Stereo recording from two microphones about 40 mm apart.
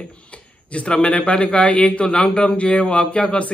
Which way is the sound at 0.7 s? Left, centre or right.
Left.